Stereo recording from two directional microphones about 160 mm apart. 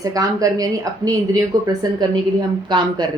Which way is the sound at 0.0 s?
20° right (ahead or behind).